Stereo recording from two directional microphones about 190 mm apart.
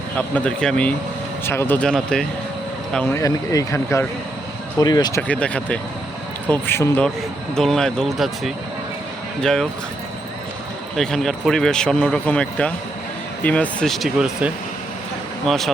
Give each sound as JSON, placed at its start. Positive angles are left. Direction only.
{"t": 0.2, "sound": "speech", "side_deg": 5}
{"t": 5.3, "sound": "speech", "side_deg": 5}
{"t": 10.9, "sound": "speech", "side_deg": 0}